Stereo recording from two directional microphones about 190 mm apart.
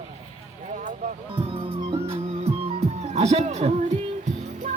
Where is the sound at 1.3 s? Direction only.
25° right (ahead or behind).